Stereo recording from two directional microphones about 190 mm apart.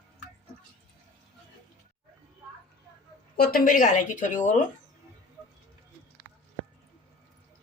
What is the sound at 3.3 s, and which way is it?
Speech, 50° left (ahead or behind).